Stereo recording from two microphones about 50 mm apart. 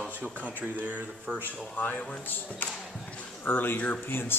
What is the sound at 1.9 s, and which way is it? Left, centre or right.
Speech, centre.